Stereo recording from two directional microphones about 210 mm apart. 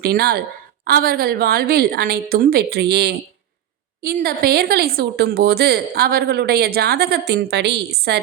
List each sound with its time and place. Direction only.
0.0 s speech: 50° right (ahead or behind)